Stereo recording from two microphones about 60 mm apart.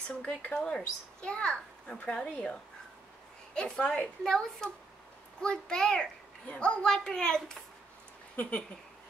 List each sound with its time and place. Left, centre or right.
0.2 s speech: left
0.6 s a woman's voice: centre
3.5 s a woman's voice: centre
4.2 s a woman's voice: centre
8.4 s speech: left